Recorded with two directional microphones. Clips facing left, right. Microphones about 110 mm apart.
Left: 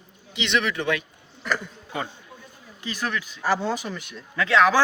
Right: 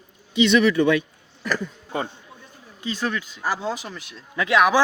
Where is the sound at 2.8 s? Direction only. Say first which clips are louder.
Right 3 dB; 25° right (ahead or behind).